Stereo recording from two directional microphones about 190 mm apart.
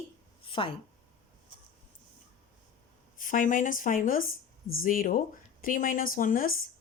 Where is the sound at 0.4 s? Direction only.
25° left (ahead or behind).